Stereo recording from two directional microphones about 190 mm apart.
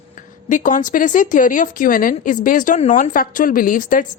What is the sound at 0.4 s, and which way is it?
Speech, 45° left (ahead or behind).